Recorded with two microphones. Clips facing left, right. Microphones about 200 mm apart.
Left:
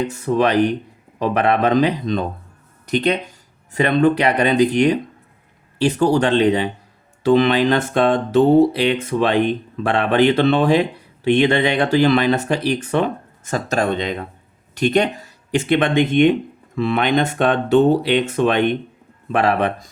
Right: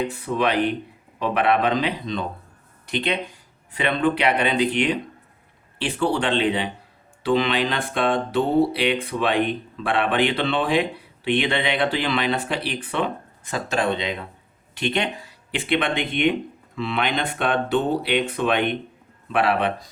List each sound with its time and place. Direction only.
0.0 s speech: 45° left (ahead or behind)